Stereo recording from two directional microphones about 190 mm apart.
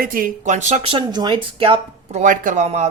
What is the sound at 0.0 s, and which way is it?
Speech, 50° right (ahead or behind).